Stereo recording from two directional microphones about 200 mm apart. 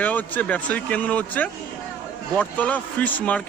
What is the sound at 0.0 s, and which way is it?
A man's voice, 10° left (ahead or behind).